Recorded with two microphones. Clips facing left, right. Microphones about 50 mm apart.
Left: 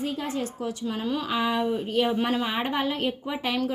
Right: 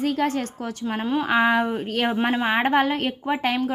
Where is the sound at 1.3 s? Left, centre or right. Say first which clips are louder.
Right 6 dB; right.